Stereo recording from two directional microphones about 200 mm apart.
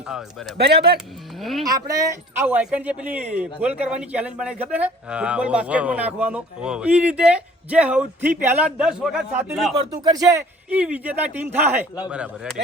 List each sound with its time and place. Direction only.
0.1 s speech: centre (ahead or behind)
0.6 s speech: 55° right (ahead or behind)
0.9 s speech: centre (ahead or behind)
1.6 s speech: 20° right (ahead or behind)
10.0 s speech: 20° right (ahead or behind)
10.7 s speech: 5° right (ahead or behind)